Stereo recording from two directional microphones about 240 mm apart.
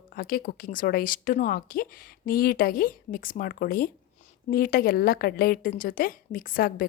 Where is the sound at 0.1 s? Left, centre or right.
Left.